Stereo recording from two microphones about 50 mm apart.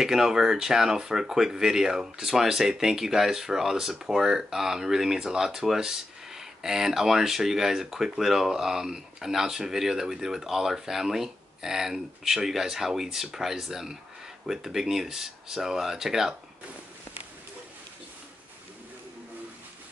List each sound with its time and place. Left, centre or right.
0.0 s speech: centre